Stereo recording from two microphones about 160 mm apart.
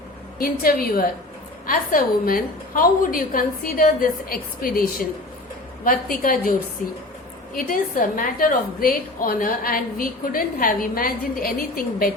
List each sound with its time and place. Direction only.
0.3 s a woman's voice: 65° left (ahead or behind)
7.5 s a woman's voice: 60° left (ahead or behind)